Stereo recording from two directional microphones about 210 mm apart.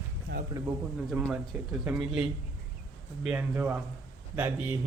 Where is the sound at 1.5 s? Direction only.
5° right (ahead or behind).